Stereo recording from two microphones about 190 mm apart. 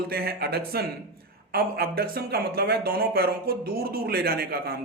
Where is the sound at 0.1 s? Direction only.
55° right (ahead or behind).